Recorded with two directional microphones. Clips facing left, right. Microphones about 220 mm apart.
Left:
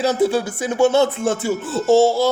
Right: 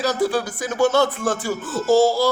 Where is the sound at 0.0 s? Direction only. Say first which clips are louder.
Left 3 dB; 25° left (ahead or behind).